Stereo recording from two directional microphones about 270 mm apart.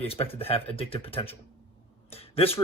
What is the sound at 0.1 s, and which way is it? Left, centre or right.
Speech, left.